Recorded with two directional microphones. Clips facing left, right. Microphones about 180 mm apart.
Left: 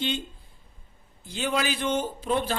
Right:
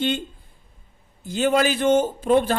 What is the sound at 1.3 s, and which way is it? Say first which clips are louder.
Speech: right 8 dB; 45° right (ahead or behind).